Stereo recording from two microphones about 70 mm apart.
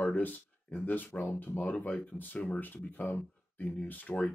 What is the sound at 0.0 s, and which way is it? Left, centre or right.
Speech, left.